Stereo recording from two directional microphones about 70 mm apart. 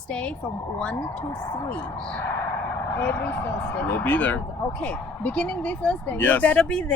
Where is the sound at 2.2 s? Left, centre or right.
Left; by 7.0 s centre.